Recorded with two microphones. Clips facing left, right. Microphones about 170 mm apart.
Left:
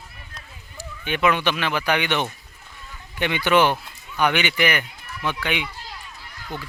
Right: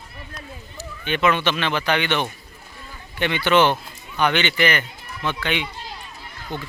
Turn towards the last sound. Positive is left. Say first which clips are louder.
# right 2 dB
turn(degrees=-25)  # may be behind; listen again after turning